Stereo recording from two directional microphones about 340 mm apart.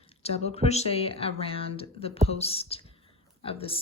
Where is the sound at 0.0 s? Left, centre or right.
Centre.